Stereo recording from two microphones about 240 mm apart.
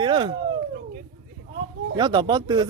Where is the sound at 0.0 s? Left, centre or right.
Centre.